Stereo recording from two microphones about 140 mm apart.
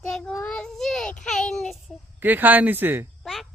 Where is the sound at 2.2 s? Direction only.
15° right (ahead or behind).